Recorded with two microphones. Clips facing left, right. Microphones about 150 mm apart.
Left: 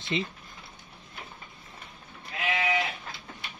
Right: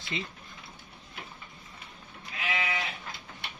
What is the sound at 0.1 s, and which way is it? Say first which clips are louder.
Speech: left 6 dB; 20° left (ahead or behind).